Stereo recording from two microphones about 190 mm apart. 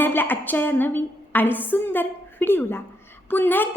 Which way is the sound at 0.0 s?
10° left (ahead or behind).